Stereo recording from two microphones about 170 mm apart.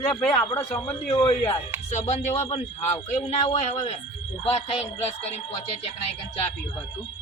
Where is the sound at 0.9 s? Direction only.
35° left (ahead or behind).